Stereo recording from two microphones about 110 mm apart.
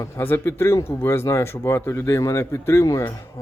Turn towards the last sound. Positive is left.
turn(degrees=25)  # may be behind; listen again after turning